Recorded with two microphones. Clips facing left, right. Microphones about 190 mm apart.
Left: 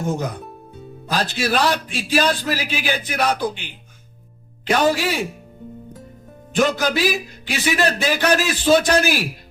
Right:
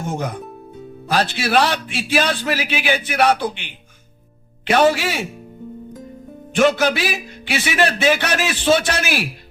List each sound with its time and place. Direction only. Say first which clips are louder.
1.2 s speech: right 2 dB; 40° left (ahead or behind)
4.8 s speech: right 3 dB; 40° left (ahead or behind)
6.5 s speech: right 3 dB; 40° left (ahead or behind)